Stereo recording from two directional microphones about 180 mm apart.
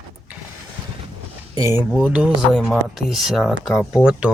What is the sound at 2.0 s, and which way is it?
Speech, 5° right (ahead or behind).